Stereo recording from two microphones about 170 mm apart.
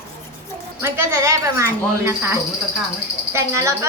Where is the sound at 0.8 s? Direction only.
15° right (ahead or behind).